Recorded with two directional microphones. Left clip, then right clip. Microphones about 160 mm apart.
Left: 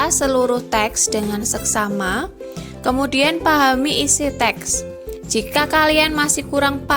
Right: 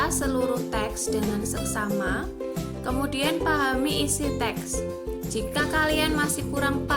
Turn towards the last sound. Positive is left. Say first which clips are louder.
# left 8 dB
turn(degrees=50)  # may be behind; listen again after turning